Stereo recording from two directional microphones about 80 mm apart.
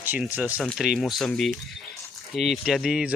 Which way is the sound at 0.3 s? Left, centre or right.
Centre.